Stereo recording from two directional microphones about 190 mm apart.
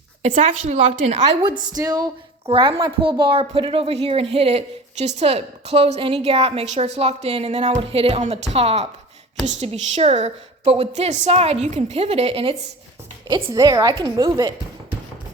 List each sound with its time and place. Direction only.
0.2 s a woman's voice: 30° right (ahead or behind); by 14.9 s 15° right (ahead or behind)